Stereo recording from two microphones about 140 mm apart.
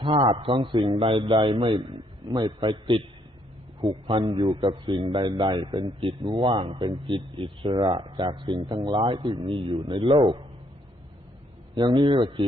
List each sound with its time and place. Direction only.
0.0 s a man's voice: 40° right (ahead or behind)
11.7 s a man's voice: 30° right (ahead or behind)